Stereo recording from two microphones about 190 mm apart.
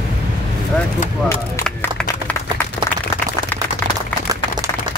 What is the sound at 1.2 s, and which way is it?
Speech, 15° left (ahead or behind).